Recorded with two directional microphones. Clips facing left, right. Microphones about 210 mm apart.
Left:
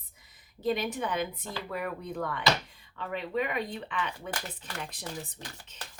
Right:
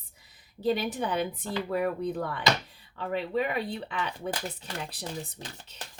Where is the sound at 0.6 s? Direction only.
35° right (ahead or behind).